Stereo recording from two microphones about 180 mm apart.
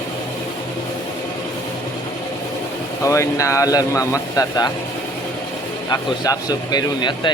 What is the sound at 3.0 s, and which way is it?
Speech, 15° left (ahead or behind).